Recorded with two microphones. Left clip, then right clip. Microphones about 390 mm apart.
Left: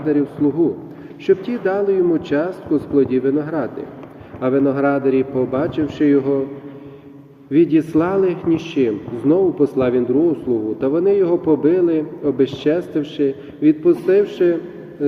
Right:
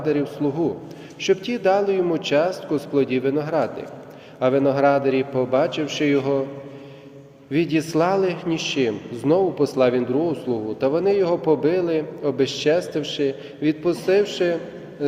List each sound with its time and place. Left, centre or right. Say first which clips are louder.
0.0 s a man's voice: left 4 dB; centre
7.5 s a man's voice: left 6 dB; centre